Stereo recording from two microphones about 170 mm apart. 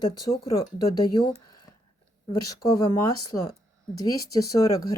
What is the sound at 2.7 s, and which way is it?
Speech, 25° left (ahead or behind).